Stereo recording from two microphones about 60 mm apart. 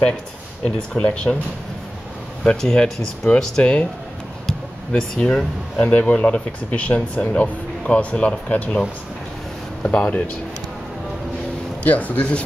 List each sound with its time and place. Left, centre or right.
0.7 s speech: centre
2.4 s speech: centre
5.9 s speech: left
9.8 s speech: left
11.8 s speech: left